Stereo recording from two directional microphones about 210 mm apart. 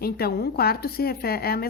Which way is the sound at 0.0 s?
50° left (ahead or behind).